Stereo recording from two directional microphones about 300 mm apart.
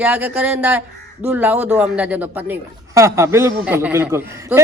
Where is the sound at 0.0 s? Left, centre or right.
Centre.